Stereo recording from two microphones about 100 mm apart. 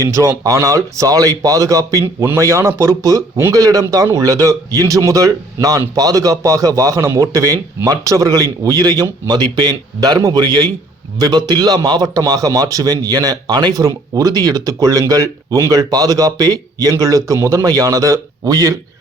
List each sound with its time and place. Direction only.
0.0 s a man's voice: 30° right (ahead or behind)